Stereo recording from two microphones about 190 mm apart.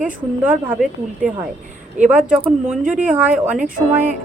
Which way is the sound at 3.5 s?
45° right (ahead or behind).